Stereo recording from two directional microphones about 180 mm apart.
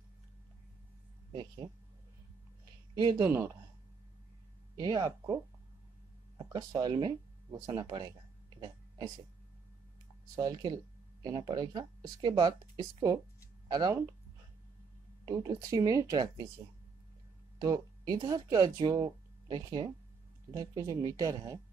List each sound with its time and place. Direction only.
2.9 s speech: 25° right (ahead or behind)
3.3 s speech: 15° right (ahead or behind)
4.7 s speech: 25° right (ahead or behind)
8.5 s a sound: 20° right (ahead or behind)
10.3 s speech: 20° right (ahead or behind)
15.2 s speech: 20° right (ahead or behind)
17.6 s speech: 20° right (ahead or behind)